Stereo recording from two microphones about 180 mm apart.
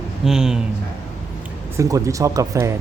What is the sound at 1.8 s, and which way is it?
Speech, 20° right (ahead or behind).